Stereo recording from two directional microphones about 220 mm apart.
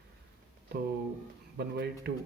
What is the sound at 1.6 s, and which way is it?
Speech, 50° right (ahead or behind).